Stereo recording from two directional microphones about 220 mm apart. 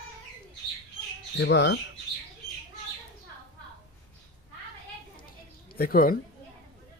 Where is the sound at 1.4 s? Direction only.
55° left (ahead or behind).